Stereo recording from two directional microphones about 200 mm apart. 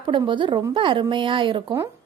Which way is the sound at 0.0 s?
25° right (ahead or behind).